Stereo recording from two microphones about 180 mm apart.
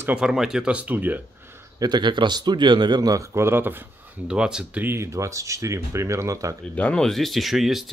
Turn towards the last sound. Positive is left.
turn(degrees=0)  # may be behind; listen again after turning